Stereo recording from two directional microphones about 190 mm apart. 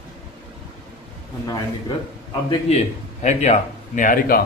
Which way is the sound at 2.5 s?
35° left (ahead or behind).